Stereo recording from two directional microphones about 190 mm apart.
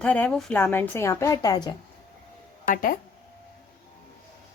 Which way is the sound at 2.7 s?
50° left (ahead or behind).